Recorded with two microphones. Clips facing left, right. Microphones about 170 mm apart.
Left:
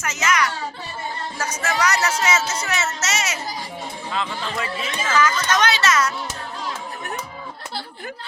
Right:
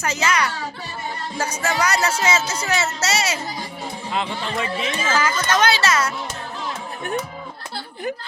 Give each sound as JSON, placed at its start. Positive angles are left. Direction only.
{"t": 0.0, "sound": "music", "side_deg": -30}
{"t": 2.5, "sound": "speech", "side_deg": -30}